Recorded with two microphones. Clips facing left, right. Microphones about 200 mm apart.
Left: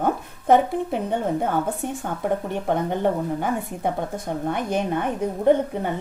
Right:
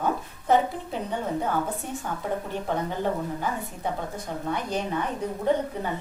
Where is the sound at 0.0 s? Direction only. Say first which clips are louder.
Left 4 dB; 55° left (ahead or behind).